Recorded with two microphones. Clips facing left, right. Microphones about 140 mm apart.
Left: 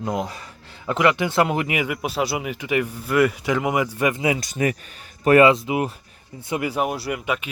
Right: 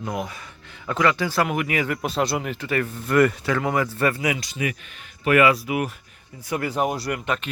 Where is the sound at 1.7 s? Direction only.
10° left (ahead or behind).